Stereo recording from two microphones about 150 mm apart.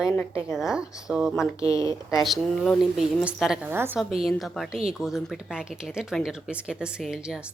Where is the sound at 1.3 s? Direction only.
20° left (ahead or behind).